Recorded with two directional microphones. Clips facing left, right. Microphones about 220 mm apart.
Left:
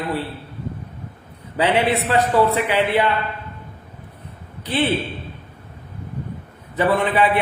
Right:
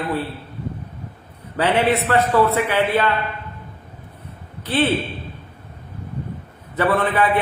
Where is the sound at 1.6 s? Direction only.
15° left (ahead or behind).